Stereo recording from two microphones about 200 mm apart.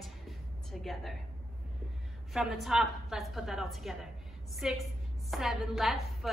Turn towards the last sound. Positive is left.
turn(degrees=0)  # may be behind; listen again after turning